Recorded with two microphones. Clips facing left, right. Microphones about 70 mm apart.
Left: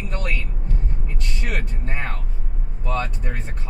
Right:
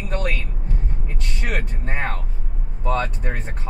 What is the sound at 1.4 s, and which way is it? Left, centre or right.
Music, right.